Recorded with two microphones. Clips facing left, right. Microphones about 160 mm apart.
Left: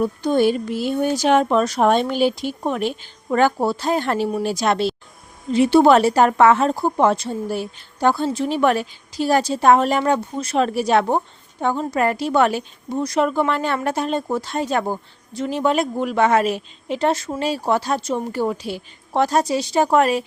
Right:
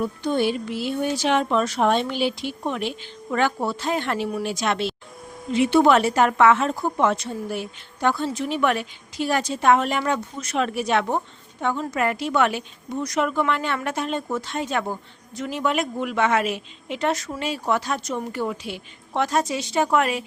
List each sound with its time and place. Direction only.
0.0 s a woman's voice: 40° left (ahead or behind)